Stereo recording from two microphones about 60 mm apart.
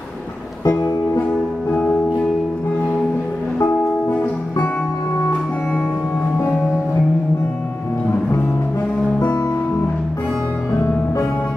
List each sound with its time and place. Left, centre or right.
0.7 s music: left
1.7 s music: centre